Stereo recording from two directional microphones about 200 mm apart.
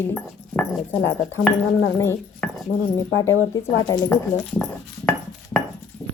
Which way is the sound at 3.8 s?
20° left (ahead or behind).